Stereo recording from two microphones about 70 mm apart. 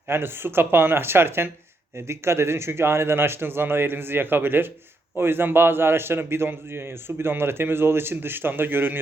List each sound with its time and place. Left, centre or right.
0.1 s a man's voice: right